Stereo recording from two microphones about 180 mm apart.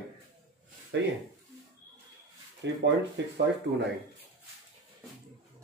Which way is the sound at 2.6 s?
80° right.